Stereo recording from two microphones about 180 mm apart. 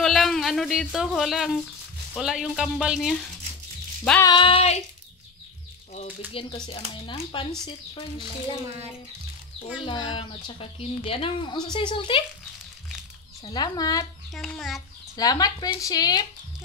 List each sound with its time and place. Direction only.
0.0 s speech: centre (ahead or behind)
4.2 s speech: 25° left (ahead or behind)
6.3 s speech: 25° left (ahead or behind)
9.8 s speech: 25° left (ahead or behind)
13.4 s speech: 25° left (ahead or behind)
14.3 s speech: centre (ahead or behind)
15.1 s speech: 20° left (ahead or behind)